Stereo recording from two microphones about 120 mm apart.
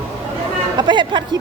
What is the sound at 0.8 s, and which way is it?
Speech, 40° right (ahead or behind).